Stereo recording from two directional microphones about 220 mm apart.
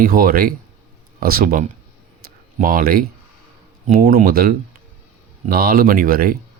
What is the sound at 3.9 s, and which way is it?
Speech, 35° right (ahead or behind).